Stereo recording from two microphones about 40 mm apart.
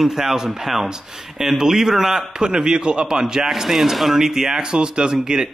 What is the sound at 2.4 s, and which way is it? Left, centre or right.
Speech, centre.